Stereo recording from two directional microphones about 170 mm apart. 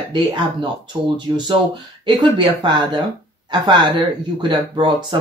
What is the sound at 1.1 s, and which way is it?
Speech, 25° right (ahead or behind).